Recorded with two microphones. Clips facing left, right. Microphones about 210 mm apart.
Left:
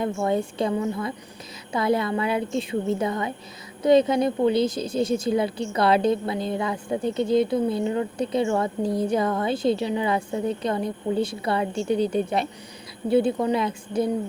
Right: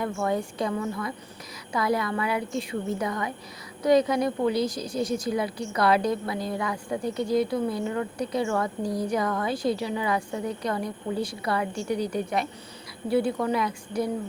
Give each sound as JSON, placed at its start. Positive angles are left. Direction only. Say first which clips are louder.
{"t": 0.0, "sound": "speech", "louder": "left 3 dB", "side_deg": 25}